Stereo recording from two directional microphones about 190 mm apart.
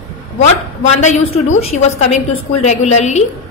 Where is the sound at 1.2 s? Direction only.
90° left.